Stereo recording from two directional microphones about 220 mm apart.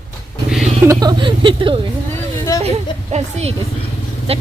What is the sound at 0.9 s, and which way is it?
Speech, 20° right (ahead or behind).